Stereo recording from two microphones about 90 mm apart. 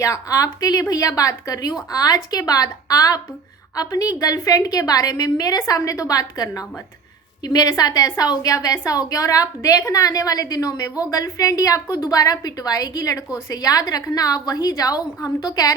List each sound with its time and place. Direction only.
0.0 s a woman's voice: 35° left (ahead or behind)